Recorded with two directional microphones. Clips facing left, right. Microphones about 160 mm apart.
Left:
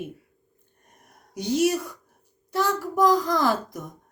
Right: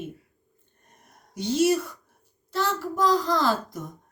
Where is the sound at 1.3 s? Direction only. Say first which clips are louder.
Right 1 dB; 15° left (ahead or behind).